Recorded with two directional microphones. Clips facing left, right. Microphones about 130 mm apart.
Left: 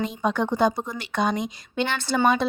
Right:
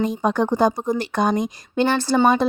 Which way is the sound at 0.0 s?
45° right (ahead or behind).